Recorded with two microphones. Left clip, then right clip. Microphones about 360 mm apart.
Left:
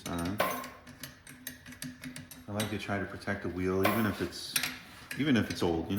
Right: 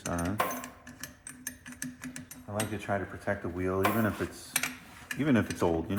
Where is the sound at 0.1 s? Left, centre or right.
Right.